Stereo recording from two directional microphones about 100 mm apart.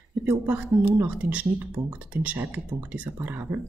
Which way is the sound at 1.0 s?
15° right (ahead or behind).